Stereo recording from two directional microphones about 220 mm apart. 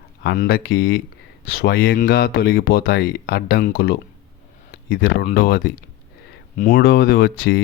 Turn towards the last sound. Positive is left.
turn(degrees=45)  # may be behind; listen again after turning